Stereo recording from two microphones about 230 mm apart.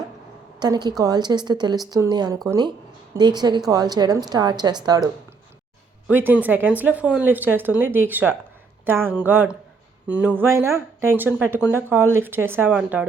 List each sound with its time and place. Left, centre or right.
0.6 s speech: centre
6.1 s speech: centre